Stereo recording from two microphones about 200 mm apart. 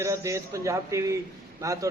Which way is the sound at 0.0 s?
15° right (ahead or behind).